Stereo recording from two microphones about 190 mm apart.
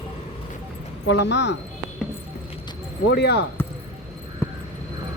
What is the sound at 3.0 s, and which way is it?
Speech, 60° left (ahead or behind).